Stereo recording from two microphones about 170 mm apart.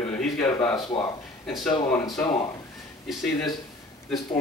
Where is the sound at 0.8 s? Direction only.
20° left (ahead or behind).